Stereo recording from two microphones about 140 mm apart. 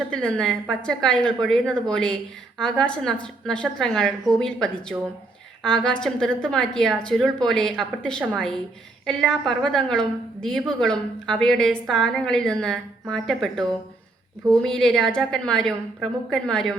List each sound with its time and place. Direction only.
0.1 s a woman's voice: 5° left (ahead or behind)